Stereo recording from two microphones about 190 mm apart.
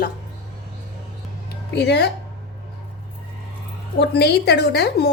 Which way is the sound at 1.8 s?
60° left (ahead or behind).